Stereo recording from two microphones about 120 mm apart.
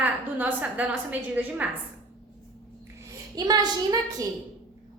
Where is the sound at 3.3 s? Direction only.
35° right (ahead or behind).